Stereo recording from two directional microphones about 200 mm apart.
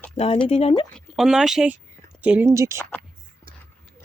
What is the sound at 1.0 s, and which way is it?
Speech, centre (ahead or behind).